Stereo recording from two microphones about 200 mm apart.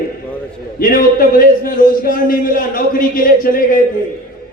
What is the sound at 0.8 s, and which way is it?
A man's voice, 45° left (ahead or behind).